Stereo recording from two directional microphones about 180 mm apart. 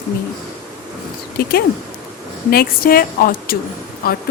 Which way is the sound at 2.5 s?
55° left (ahead or behind).